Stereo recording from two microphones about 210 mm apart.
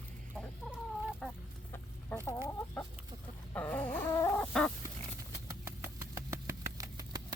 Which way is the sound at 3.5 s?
5° left (ahead or behind).